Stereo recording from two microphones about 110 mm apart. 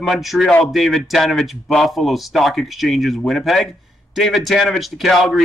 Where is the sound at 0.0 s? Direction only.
Centre (ahead or behind).